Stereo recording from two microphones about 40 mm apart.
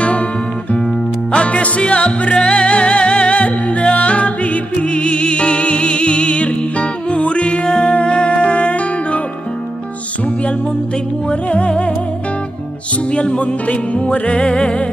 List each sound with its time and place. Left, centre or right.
1.3 s music: left
7.6 s music: centre
7.9 s music: left
11.2 s music: left
13.1 s music: left
14.3 s music: left